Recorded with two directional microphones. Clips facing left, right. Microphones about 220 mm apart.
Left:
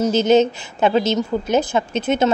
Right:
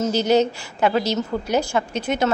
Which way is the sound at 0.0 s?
20° left (ahead or behind).